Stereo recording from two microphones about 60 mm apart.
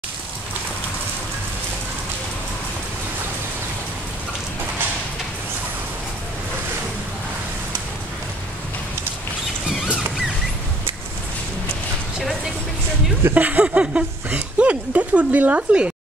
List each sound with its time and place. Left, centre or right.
13.3 s speech: right